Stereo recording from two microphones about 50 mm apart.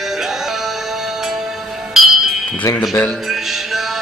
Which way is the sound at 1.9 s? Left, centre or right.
Centre.